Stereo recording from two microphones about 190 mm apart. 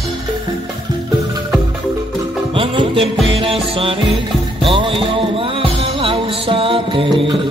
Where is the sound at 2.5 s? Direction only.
30° right (ahead or behind).